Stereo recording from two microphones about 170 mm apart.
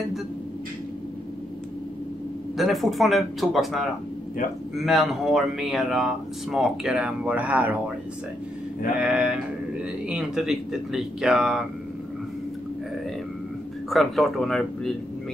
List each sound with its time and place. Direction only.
2.5 s speech: centre (ahead or behind)
9.0 s a sound: 5° right (ahead or behind)
10.0 s speech: 5° right (ahead or behind)
13.8 s speech: centre (ahead or behind)